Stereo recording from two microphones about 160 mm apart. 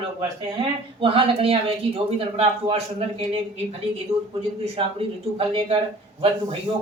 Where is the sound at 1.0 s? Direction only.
35° right (ahead or behind).